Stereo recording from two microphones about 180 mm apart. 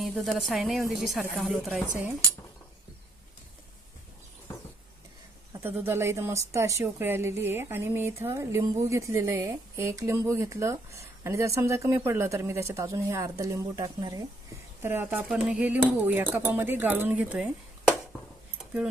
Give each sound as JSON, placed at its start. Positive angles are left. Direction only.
{"t": 0.0, "sound": "a woman's voice", "side_deg": 0}
{"t": 5.5, "sound": "speech", "side_deg": -10}